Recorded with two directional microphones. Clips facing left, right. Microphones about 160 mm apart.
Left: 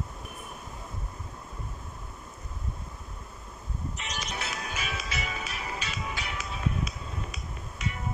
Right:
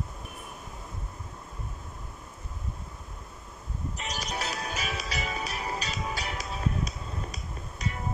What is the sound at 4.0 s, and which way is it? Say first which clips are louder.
Music: right 4 dB; 35° right (ahead or behind).